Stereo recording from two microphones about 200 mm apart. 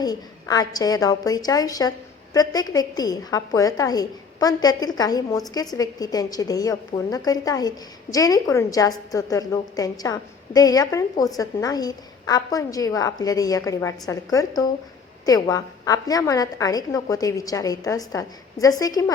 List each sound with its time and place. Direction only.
0.0 s a woman's voice: 20° left (ahead or behind)